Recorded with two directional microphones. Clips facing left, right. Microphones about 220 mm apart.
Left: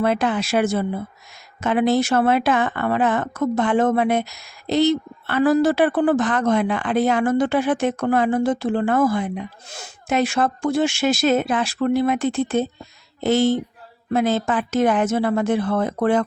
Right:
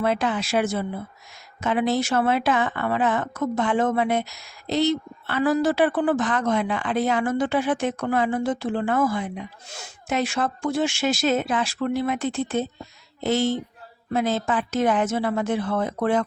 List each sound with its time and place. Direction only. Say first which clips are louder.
0.0 s a woman's voice: left 3 dB; 60° left (ahead or behind)
10.1 s a woman's voice: left 4 dB; 60° left (ahead or behind)